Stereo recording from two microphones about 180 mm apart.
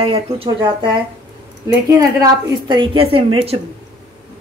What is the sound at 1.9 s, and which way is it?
A woman's voice, 20° right (ahead or behind).